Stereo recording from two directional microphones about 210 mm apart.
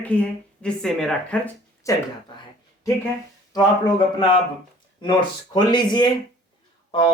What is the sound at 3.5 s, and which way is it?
Speech, 20° left (ahead or behind).